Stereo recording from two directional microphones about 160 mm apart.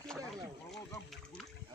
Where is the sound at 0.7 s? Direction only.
Centre (ahead or behind).